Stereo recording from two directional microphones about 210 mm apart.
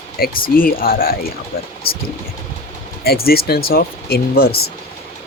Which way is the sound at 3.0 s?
45° left (ahead or behind).